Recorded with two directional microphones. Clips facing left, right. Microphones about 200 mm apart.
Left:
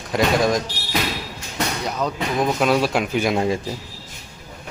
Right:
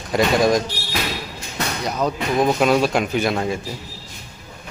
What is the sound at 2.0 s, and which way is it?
Speech, 10° right (ahead or behind).